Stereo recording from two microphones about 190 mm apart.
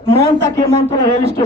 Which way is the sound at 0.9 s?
20° left (ahead or behind).